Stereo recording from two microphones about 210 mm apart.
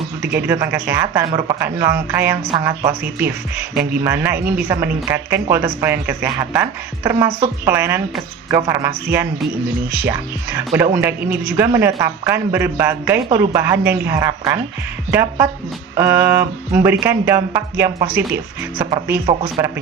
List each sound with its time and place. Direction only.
0.3 s a woman's voice: 10° right (ahead or behind)
10.1 s a woman's voice: 10° right (ahead or behind)
19.2 s speech: 25° right (ahead or behind)